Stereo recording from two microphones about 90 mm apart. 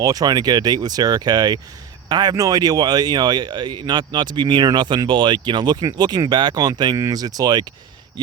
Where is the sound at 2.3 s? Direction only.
40° right (ahead or behind).